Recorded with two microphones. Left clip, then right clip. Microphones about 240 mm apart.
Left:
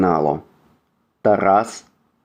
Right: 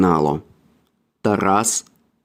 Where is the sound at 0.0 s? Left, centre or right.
Right.